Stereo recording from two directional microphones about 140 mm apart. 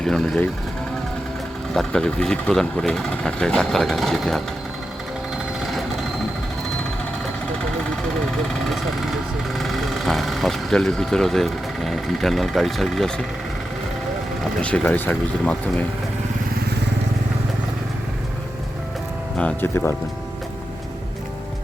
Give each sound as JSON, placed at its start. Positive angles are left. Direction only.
{"t": 0.0, "sound": "speech", "side_deg": 5}
{"t": 1.7, "sound": "speech", "side_deg": 5}
{"t": 5.5, "sound": "vehicle", "side_deg": 0}
{"t": 9.6, "sound": "speech", "side_deg": 0}
{"t": 14.6, "sound": "speech", "side_deg": 10}
{"t": 19.4, "sound": "speech", "side_deg": 10}